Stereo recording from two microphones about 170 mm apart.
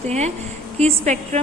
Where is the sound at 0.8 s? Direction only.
40° right (ahead or behind).